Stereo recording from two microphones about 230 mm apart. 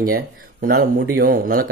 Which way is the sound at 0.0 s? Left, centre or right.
Right.